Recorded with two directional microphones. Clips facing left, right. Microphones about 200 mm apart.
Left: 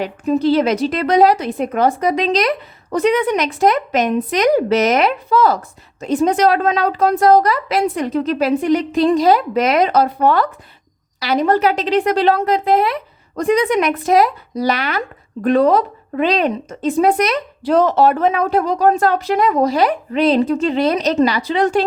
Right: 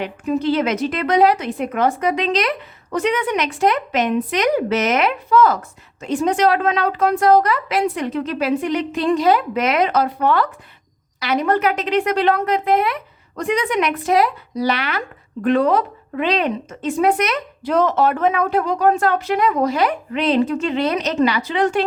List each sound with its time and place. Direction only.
0.0 s speech: 35° left (ahead or behind)